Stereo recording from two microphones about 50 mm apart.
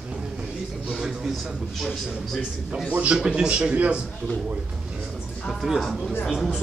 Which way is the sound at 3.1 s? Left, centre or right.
Centre.